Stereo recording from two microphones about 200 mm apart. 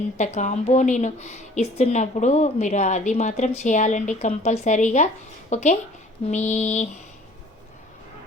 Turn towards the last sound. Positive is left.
turn(degrees=35)  # may be behind; listen again after turning